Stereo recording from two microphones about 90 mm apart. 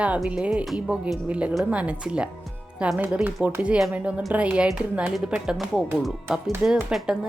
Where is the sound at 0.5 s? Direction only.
10° right (ahead or behind).